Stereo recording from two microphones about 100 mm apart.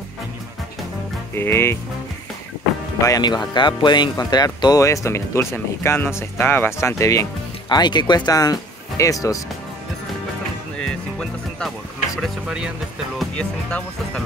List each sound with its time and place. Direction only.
1.3 s speech: 25° left (ahead or behind)
3.1 s speech: 45° left (ahead or behind)
7.7 s speech: 45° left (ahead or behind)
10.8 s speech: 5° left (ahead or behind)
12.2 s speech: 10° right (ahead or behind)
13.4 s speech: 10° left (ahead or behind)